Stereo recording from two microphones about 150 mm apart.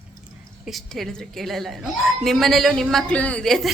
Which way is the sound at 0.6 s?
Centre (ahead or behind).